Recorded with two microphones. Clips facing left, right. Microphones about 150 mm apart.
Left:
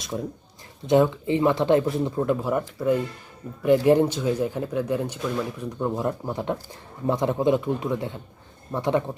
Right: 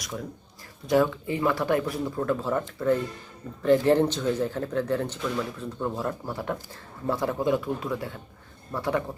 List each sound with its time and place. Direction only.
0.0 s speech: 25° left (ahead or behind)